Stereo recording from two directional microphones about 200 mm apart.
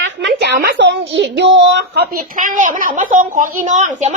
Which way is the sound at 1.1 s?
65° right (ahead or behind).